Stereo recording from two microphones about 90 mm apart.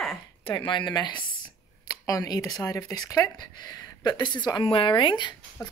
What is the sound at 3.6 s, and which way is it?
A woman's voice, 50° left (ahead or behind).